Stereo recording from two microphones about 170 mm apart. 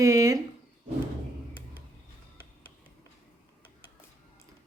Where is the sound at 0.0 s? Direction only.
20° right (ahead or behind).